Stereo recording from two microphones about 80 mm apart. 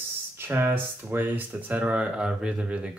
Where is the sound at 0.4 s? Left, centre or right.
Right.